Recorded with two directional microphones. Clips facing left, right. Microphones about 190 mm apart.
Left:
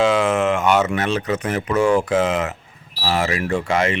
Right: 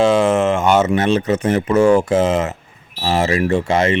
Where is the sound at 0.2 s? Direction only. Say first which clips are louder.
Right 3 dB; 30° right (ahead or behind).